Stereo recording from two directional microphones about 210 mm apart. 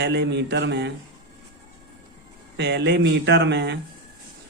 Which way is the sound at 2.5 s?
55° right (ahead or behind).